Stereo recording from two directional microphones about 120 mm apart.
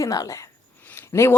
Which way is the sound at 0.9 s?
20° left (ahead or behind).